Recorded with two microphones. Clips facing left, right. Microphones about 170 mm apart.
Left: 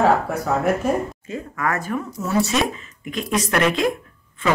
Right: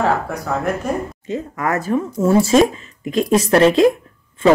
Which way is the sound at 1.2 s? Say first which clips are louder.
Right 3 dB; 20° right (ahead or behind).